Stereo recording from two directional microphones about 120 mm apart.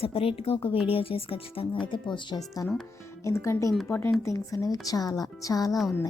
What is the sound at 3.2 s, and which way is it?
A woman's voice, 25° left (ahead or behind).